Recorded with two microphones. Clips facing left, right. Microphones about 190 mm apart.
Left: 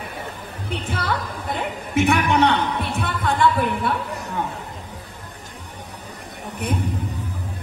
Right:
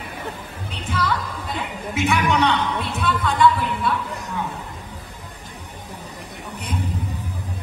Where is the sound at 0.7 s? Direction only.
55° left (ahead or behind).